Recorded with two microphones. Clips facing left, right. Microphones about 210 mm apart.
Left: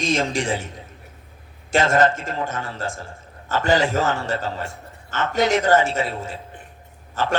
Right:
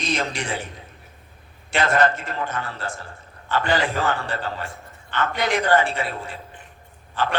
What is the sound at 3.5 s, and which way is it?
Speech, 40° left (ahead or behind).